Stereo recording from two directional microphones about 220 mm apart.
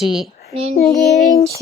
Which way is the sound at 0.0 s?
Centre (ahead or behind).